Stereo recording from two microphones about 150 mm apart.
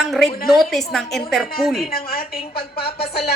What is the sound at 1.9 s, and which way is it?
Speech, 80° left.